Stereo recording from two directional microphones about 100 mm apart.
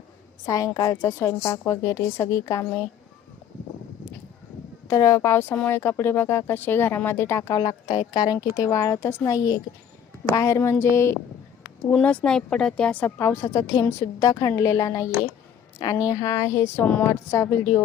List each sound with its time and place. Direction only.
0.4 s a woman's voice: 35° left (ahead or behind)
4.9 s a woman's voice: 35° left (ahead or behind)
7.9 s a woman's voice: 40° left (ahead or behind); by 11.2 s 25° left (ahead or behind)
12.0 s speech: 10° left (ahead or behind)
13.1 s a woman's voice: 25° left (ahead or behind)
14.3 s a woman's voice: 40° left (ahead or behind)